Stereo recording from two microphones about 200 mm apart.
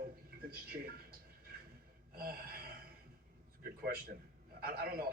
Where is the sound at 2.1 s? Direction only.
50° right (ahead or behind).